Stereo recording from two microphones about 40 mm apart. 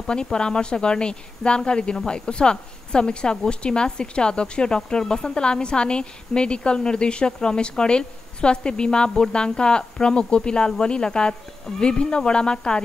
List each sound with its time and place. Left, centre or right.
0.1 s a woman's voice: left